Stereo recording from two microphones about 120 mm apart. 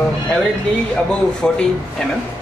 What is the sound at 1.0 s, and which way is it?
Speech, 5° left (ahead or behind).